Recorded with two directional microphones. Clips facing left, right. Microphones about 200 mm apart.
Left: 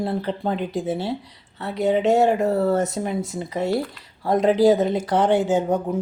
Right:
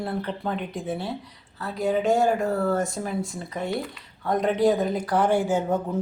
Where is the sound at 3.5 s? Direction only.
80° left.